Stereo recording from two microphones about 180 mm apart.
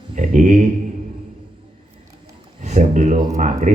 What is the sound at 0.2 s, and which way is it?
Speech, 45° right (ahead or behind).